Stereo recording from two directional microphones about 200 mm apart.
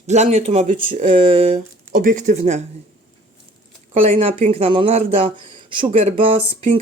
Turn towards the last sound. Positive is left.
turn(degrees=-30)  # may be behind; listen again after turning